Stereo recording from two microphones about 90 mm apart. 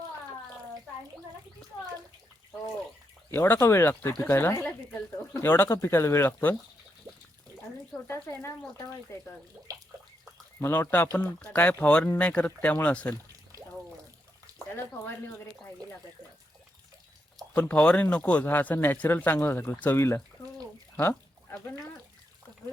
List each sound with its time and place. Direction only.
3.3 s speech: 25° left (ahead or behind)
8.0 s speech: 30° left (ahead or behind)
9.7 s a sound: 45° right (ahead or behind)
10.6 s speech: 25° left (ahead or behind)
17.5 s speech: 15° left (ahead or behind)
21.0 s a sound: 25° left (ahead or behind)